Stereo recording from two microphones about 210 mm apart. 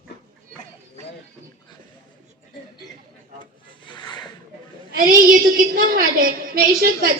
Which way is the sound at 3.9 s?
20° left (ahead or behind).